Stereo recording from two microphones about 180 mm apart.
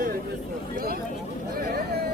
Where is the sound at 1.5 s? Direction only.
55° right (ahead or behind).